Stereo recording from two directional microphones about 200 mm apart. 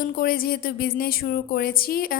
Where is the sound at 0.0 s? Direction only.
45° left (ahead or behind).